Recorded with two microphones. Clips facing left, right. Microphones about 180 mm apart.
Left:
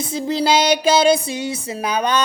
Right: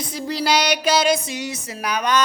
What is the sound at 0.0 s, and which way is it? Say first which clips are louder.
Music: left 4 dB; 25° left (ahead or behind).